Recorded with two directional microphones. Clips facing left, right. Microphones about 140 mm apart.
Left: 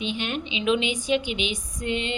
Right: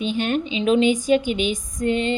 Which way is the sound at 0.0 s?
45° right (ahead or behind).